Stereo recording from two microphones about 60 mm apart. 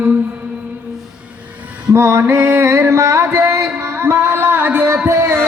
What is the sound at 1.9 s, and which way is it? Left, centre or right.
Music, right.